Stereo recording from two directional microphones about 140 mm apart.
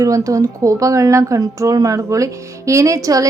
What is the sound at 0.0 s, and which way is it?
Speech, 25° right (ahead or behind).